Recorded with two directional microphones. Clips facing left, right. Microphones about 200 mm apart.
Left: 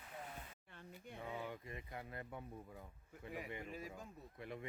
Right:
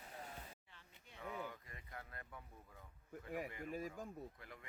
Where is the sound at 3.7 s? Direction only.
45° right (ahead or behind).